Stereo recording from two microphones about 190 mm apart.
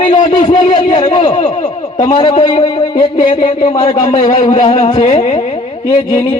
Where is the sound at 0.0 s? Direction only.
30° left (ahead or behind).